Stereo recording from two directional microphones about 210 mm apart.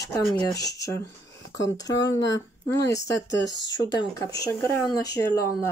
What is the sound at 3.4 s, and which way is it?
Speech, 55° left (ahead or behind).